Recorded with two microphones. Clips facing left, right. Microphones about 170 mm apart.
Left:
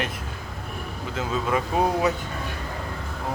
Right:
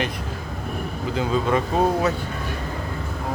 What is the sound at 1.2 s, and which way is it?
Speech, 5° left (ahead or behind).